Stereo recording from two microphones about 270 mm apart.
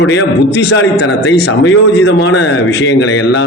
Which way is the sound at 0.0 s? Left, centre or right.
Left.